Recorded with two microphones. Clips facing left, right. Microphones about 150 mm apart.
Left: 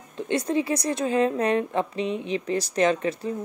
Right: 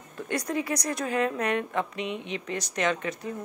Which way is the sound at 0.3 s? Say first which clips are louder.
Left 5 dB; 25° left (ahead or behind).